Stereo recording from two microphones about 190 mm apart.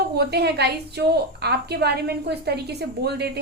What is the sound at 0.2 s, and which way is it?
A woman's voice, 60° right (ahead or behind).